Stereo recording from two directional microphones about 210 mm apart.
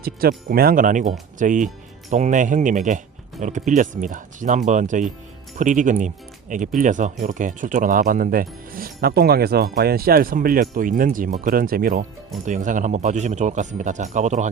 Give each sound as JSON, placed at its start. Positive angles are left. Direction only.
{"t": 0.0, "sound": "speech", "side_deg": -45}